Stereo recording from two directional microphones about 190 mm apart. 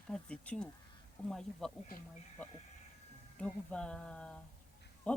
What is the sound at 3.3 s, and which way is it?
Speech, 5° left (ahead or behind).